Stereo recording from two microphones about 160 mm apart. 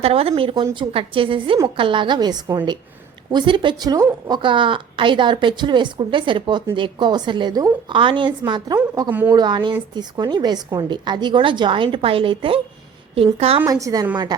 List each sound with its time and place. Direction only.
0.0 s a woman's voice: 40° right (ahead or behind)
13.7 s a woman's voice: 20° right (ahead or behind)